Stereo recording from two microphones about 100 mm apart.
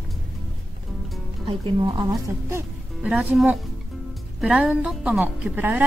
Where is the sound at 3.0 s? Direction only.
10° right (ahead or behind).